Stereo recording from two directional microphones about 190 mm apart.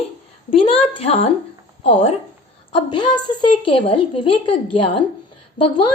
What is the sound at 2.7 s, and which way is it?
Speech, 25° left (ahead or behind).